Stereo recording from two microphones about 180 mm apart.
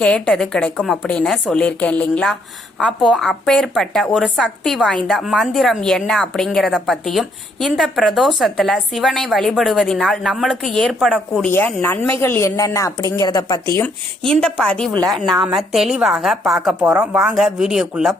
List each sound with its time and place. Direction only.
0.0 s a woman's voice: 5° left (ahead or behind)
14.3 s a woman's voice: 5° left (ahead or behind)